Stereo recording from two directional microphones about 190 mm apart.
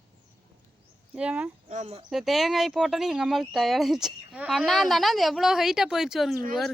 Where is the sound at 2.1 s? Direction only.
Centre (ahead or behind).